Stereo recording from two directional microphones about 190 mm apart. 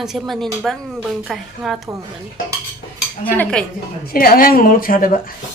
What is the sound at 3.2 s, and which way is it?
Dishes, 10° left (ahead or behind).